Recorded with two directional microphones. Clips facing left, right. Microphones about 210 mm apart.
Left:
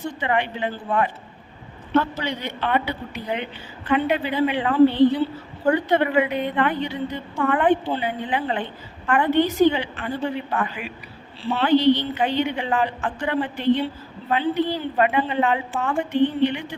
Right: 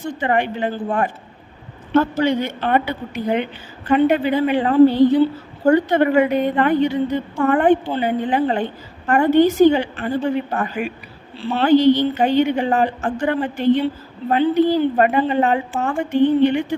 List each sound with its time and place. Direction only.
0.2 s a woman's voice: 45° right (ahead or behind)